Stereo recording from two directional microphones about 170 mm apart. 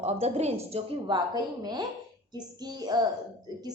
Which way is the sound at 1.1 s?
25° right (ahead or behind).